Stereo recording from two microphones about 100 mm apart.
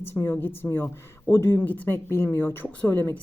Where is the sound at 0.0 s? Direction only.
25° left (ahead or behind).